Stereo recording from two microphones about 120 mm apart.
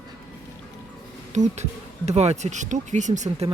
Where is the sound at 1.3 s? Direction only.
80° right.